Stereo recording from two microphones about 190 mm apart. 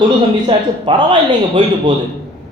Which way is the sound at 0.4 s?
25° right (ahead or behind).